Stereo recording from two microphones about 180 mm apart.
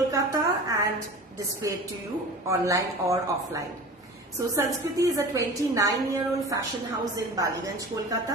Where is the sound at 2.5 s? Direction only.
15° right (ahead or behind).